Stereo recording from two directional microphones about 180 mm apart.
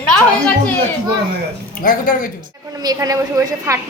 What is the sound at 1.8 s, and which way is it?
Speech, 50° left (ahead or behind).